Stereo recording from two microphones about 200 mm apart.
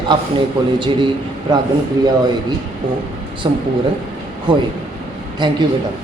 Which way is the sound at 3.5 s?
25° right (ahead or behind).